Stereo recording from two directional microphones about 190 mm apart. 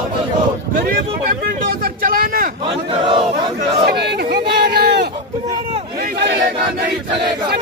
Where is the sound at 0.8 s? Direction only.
50° right (ahead or behind).